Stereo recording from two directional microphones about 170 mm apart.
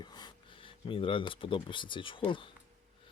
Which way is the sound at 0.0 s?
25° left (ahead or behind).